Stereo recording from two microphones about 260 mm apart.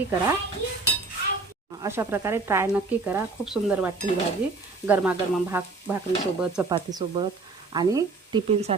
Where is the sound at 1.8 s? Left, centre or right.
Centre.